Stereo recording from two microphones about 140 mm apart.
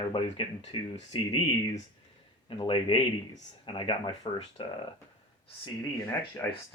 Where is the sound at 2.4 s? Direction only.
40° left (ahead or behind).